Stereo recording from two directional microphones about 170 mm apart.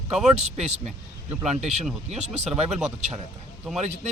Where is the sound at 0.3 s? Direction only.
40° right (ahead or behind).